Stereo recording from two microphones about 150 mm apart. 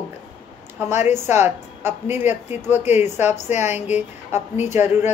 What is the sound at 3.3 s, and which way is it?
Speech, 50° left (ahead or behind).